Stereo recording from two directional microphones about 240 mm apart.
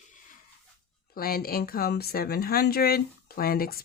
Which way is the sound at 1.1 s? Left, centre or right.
Left.